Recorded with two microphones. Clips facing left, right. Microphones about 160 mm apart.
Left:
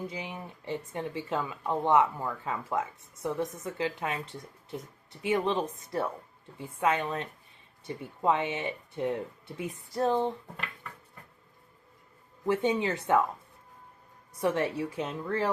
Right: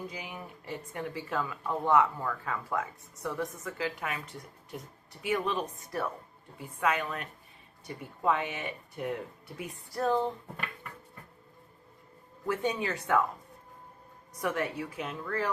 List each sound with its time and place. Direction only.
0.1 s speech: 25° left (ahead or behind)
12.5 s speech: 25° left (ahead or behind)
14.4 s speech: 30° left (ahead or behind)